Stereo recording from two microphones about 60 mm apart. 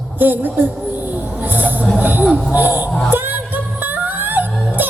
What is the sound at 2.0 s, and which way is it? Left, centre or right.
Speech, right.